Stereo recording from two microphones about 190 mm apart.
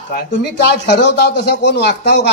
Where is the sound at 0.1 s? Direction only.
60° left (ahead or behind).